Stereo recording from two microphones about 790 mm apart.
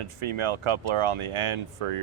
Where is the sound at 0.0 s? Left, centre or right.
Right.